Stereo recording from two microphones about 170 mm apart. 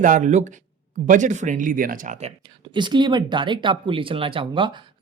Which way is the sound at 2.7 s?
25° right (ahead or behind).